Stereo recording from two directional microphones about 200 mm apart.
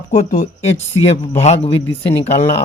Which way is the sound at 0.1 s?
35° left (ahead or behind).